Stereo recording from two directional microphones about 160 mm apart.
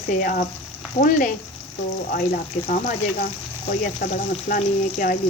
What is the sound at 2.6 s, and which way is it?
Speech, 50° left (ahead or behind).